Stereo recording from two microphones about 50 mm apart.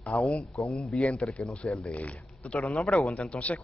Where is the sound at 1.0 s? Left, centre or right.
Left.